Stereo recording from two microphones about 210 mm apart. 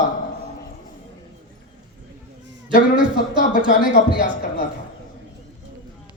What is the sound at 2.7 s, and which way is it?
Speech, 40° left (ahead or behind).